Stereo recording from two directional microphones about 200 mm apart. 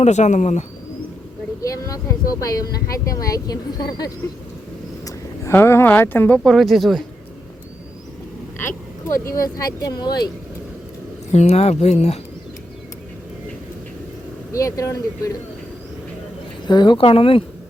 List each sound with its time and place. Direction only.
0.0 s speech: 35° left (ahead or behind)
1.6 s speech: 15° left (ahead or behind); by 7.0 s centre (ahead or behind)
8.5 s a sound: 10° left (ahead or behind)
9.2 s speech: 15° left (ahead or behind)
11.3 s speech: 35° left (ahead or behind)
14.5 s speech: 15° left (ahead or behind)
16.6 s speech: 20° left (ahead or behind)